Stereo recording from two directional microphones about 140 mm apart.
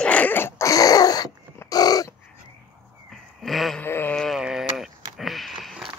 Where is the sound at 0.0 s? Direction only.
10° left (ahead or behind); by 2.1 s 25° left (ahead or behind).